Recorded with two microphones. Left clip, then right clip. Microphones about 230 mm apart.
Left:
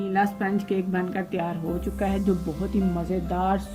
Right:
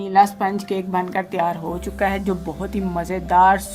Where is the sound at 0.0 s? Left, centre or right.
Centre.